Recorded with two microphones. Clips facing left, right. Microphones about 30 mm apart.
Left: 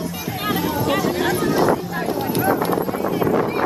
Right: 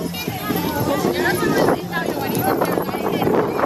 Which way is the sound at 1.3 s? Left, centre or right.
Centre.